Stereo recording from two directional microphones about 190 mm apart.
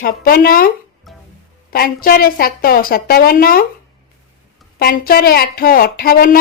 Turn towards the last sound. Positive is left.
turn(degrees=50)  # may be behind; listen again after turning